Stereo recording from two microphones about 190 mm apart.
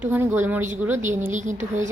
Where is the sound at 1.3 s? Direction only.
40° right (ahead or behind).